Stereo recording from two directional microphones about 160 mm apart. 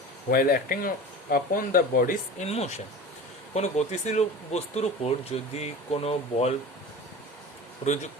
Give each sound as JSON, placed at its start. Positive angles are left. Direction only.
{"t": 0.3, "sound": "speech", "side_deg": 60}
{"t": 2.4, "sound": "speech", "side_deg": 40}